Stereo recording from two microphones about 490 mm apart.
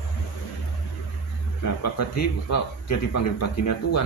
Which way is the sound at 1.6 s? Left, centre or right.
Left.